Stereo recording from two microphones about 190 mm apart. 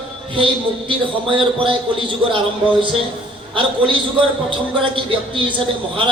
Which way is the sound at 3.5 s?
25° right (ahead or behind).